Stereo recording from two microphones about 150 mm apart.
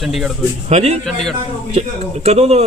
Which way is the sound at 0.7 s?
45° right (ahead or behind).